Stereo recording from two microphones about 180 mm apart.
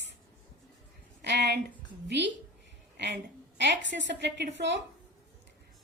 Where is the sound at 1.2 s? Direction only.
70° right (ahead or behind).